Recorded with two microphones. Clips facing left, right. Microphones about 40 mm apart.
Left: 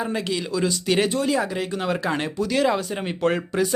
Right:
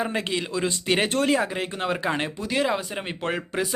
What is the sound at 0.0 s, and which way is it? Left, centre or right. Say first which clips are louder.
Speech: left 1 dB; right.